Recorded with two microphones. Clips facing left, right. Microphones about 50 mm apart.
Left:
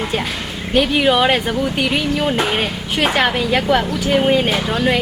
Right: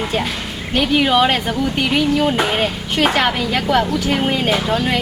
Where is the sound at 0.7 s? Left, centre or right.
Centre.